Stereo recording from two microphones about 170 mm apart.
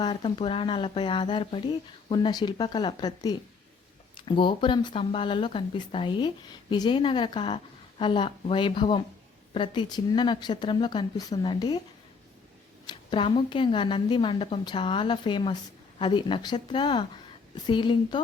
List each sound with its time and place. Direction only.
0.0 s speech: 30° left (ahead or behind)
12.8 s speech: 25° left (ahead or behind)